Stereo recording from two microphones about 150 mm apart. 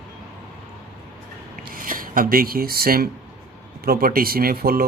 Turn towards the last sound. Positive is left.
turn(degrees=-90)